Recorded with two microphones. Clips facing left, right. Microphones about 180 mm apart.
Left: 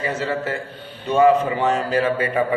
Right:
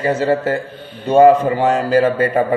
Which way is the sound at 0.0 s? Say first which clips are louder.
Right 8 dB; 45° right (ahead or behind).